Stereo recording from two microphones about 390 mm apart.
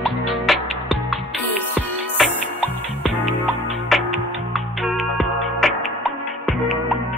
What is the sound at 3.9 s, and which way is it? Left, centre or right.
Music, centre.